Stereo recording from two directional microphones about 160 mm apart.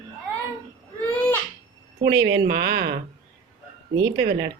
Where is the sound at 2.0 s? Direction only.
90° right.